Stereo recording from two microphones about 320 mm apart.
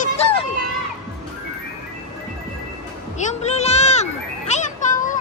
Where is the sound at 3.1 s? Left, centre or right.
Left.